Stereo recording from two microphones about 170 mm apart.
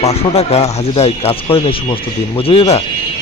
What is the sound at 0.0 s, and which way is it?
Speech, 40° left (ahead or behind).